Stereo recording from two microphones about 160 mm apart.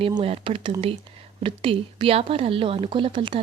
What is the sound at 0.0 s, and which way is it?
Speech, 35° right (ahead or behind).